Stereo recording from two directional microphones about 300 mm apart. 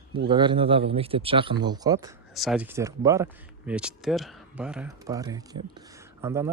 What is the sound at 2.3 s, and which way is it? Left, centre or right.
Speech, centre.